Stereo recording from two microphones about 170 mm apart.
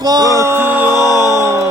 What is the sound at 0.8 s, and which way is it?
Music, 20° left (ahead or behind).